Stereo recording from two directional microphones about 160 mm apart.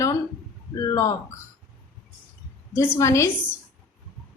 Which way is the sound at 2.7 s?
20° left (ahead or behind).